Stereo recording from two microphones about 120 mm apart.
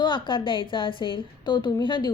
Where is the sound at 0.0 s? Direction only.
40° left (ahead or behind).